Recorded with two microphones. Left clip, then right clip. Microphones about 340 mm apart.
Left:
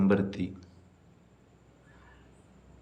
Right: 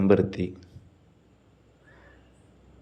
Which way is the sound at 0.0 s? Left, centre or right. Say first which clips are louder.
Right 6 dB; centre.